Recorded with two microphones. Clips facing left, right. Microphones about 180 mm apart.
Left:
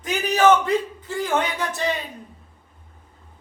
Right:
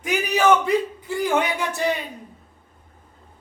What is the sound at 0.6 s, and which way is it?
A man's voice, 10° right (ahead or behind).